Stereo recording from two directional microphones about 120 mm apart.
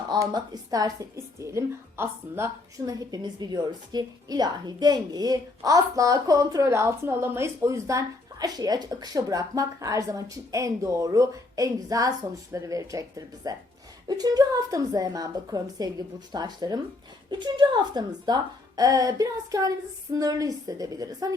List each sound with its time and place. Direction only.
0.1 s a woman's voice: 35° right (ahead or behind)